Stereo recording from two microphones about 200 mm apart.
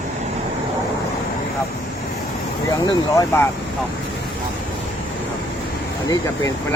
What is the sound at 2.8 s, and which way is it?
Speech, 15° left (ahead or behind).